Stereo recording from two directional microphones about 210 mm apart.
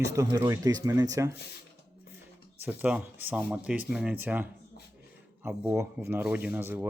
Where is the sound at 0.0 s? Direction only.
15° right (ahead or behind).